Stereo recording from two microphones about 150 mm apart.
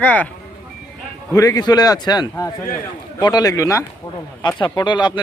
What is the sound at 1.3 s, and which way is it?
A man's voice, 25° left (ahead or behind).